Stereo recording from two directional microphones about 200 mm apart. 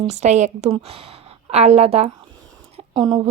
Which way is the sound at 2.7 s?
25° right (ahead or behind).